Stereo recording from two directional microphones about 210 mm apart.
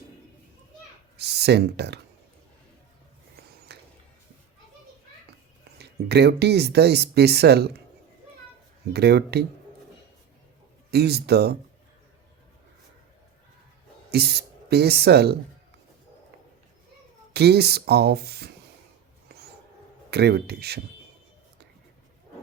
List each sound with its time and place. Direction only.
1.1 s speech: 50° right (ahead or behind)
3.7 s a sound: 50° right (ahead or behind)
5.7 s speech: 50° right (ahead or behind)
8.9 s speech: 50° right (ahead or behind)
10.9 s speech: 50° right (ahead or behind)
14.1 s speech: 50° right (ahead or behind)
17.3 s speech: 50° right (ahead or behind)
19.3 s a sound: 50° right (ahead or behind)
20.1 s speech: 50° right (ahead or behind)